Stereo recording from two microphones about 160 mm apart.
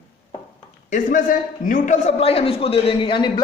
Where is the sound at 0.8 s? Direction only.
55° left (ahead or behind).